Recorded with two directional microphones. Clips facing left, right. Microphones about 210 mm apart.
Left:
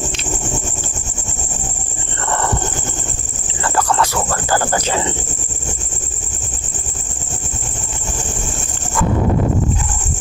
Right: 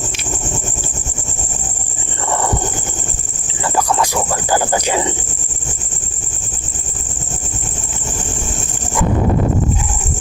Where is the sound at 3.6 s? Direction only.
10° right (ahead or behind).